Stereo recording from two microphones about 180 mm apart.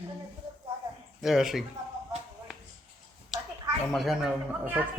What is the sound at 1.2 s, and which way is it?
Speech, centre (ahead or behind).